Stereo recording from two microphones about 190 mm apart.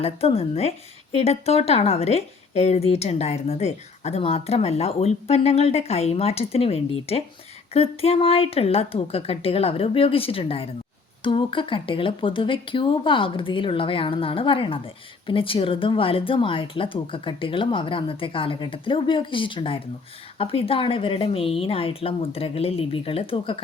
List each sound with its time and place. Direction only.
0.0 s speech: 30° left (ahead or behind)